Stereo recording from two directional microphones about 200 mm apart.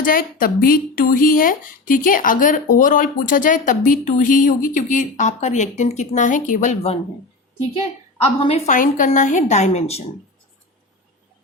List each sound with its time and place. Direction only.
0.0 s speech: 45° left (ahead or behind)
8.2 s speech: 30° left (ahead or behind)